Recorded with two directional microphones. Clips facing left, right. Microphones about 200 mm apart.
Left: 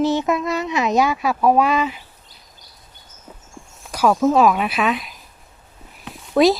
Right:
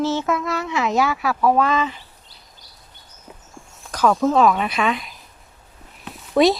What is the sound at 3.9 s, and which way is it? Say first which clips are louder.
Speech: left 1 dB; 10° left (ahead or behind).